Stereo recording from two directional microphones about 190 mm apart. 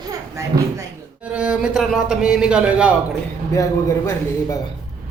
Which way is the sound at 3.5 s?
15° left (ahead or behind).